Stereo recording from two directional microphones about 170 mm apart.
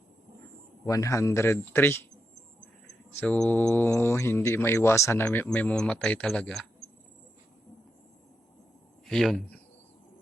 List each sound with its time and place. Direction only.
0.9 s speech: 20° left (ahead or behind)
3.2 s speech: 10° left (ahead or behind)
9.0 s speech: centre (ahead or behind)